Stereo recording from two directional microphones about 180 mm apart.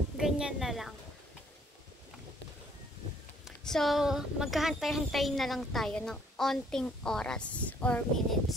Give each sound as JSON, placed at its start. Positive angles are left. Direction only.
{"t": 0.2, "sound": "a woman's voice", "side_deg": -5}
{"t": 3.4, "sound": "speech", "side_deg": 0}